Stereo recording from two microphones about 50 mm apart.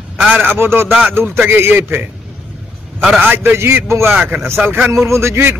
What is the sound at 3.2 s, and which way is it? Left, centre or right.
Speech, right.